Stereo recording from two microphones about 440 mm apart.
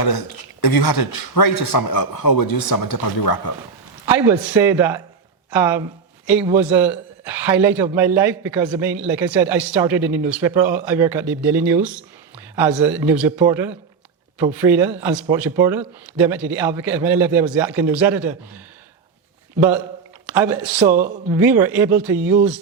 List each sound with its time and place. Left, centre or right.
0.0 s speech: left
4.0 s a man's voice: centre
20.3 s a man's voice: centre